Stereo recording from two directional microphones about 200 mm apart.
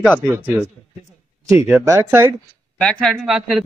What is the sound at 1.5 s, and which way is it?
Speech, 10° right (ahead or behind).